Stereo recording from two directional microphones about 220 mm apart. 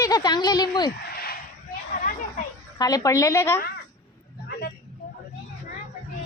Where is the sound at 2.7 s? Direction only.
15° left (ahead or behind).